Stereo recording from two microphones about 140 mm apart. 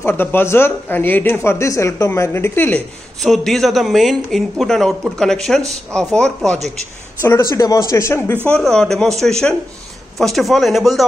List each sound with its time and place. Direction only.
0.0 s speech: 15° left (ahead or behind)
3.2 s a man's voice: centre (ahead or behind)
7.2 s speech: 20° left (ahead or behind)
8.5 s a man's voice: 5° left (ahead or behind)
10.1 s a man's voice: centre (ahead or behind)